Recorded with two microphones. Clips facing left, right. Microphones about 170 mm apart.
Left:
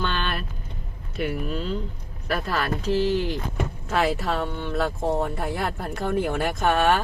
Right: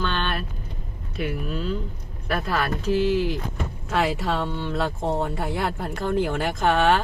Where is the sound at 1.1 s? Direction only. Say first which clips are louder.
Left 1 dB; centre (ahead or behind).